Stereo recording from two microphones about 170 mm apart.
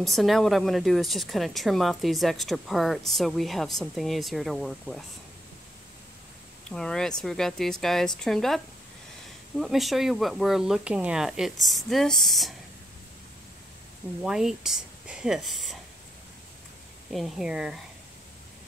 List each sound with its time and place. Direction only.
0.0 s speech: centre (ahead or behind)
6.7 s speech: 5° left (ahead or behind)
9.6 s speech: centre (ahead or behind)
14.2 s speech: 5° right (ahead or behind)
17.1 s speech: centre (ahead or behind)